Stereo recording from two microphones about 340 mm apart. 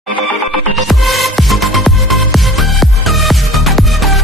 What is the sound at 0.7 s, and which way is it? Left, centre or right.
Music, centre.